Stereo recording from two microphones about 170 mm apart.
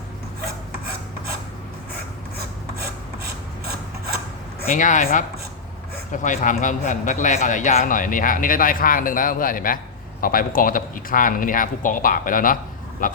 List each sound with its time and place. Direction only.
4.7 s a man's voice: 50° left (ahead or behind)